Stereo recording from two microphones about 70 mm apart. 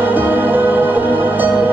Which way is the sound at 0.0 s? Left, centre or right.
Right.